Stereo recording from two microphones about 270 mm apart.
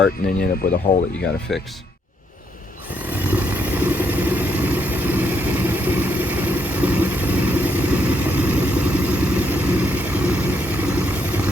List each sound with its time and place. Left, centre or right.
0.6 s speech: left
1.5 s speech: centre
3.2 s vehicle: centre